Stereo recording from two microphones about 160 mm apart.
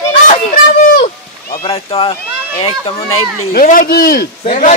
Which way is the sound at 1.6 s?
35° left (ahead or behind).